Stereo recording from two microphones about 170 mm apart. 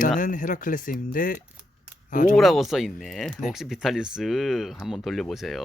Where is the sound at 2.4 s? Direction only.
Centre (ahead or behind).